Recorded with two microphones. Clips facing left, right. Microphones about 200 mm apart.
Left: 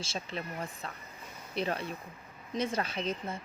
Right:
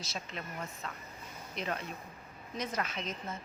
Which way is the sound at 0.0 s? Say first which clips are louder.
Left 4 dB; 30° left (ahead or behind).